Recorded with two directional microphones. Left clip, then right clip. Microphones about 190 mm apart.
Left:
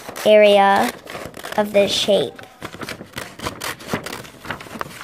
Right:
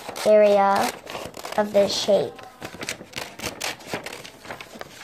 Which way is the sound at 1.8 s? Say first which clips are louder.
Left 3 dB; 25° left (ahead or behind).